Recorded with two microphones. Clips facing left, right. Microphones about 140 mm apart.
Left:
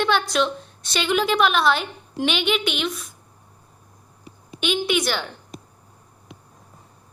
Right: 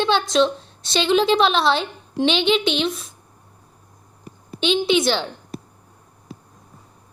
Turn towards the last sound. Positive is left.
turn(degrees=-25)  # may be behind; listen again after turning